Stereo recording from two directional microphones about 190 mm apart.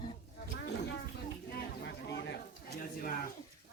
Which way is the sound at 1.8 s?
65° left (ahead or behind).